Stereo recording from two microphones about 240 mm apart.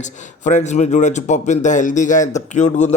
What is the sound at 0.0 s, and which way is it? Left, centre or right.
A man's voice, left.